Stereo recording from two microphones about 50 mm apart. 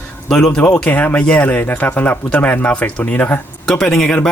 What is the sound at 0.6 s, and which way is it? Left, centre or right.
Speech, left.